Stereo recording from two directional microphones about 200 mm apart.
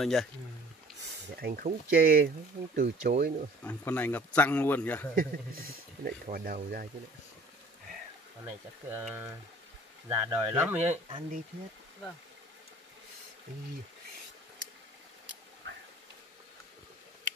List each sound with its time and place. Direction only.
0.0 s speech: centre (ahead or behind)
1.3 s speech: 50° right (ahead or behind)
3.6 s a man's voice: 5° left (ahead or behind)
5.1 s speech: 45° right (ahead or behind)
8.9 s speech: 10° right (ahead or behind)
10.8 s speech: 30° right (ahead or behind)